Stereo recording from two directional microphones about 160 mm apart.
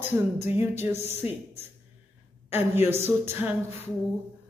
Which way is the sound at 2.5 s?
15° right (ahead or behind).